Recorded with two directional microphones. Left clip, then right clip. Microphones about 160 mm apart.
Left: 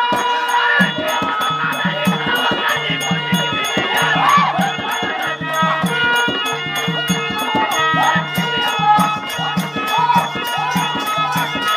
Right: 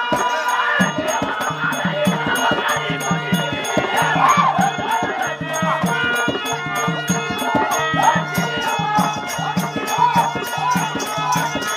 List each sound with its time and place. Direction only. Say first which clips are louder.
0.6 s music: left 6 dB; 45° right (ahead or behind)
3.9 s music: left 2 dB; 40° right (ahead or behind)
5.6 s music: left 3 dB; 45° right (ahead or behind)
7.8 s music: left 2 dB; 45° right (ahead or behind)